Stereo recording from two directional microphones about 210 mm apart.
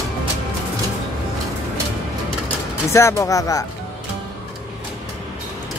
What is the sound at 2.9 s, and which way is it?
Speech, 15° left (ahead or behind).